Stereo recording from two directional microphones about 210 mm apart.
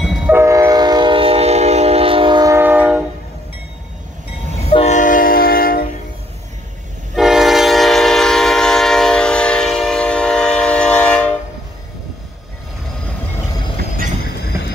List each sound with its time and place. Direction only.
0.0 s train: 5° right (ahead or behind)
4.6 s train: 30° left (ahead or behind)
7.2 s train: centre (ahead or behind)
14.2 s train: 50° left (ahead or behind)